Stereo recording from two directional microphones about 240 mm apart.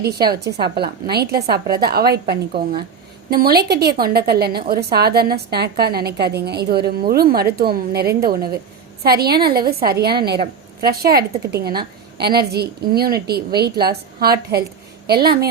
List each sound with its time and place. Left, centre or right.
0.0 s a woman's voice: right